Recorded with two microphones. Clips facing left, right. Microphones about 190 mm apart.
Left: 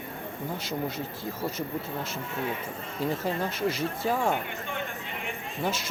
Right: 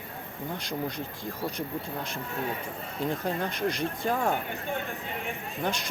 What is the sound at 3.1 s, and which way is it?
Speech, 5° left (ahead or behind).